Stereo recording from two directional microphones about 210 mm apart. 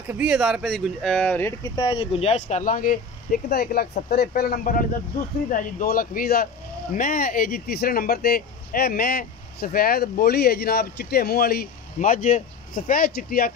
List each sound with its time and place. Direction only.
0.1 s speech: 5° right (ahead or behind)
1.8 s speech: 25° left (ahead or behind); by 13.5 s 45° left (ahead or behind)